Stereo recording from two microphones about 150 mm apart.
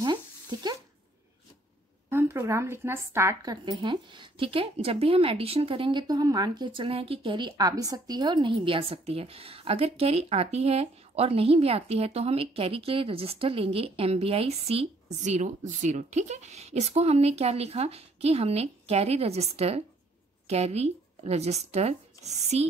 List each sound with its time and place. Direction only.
0.0 s a sound: 30° right (ahead or behind)
2.0 s speech: 15° right (ahead or behind)
3.6 s speech: 30° right (ahead or behind)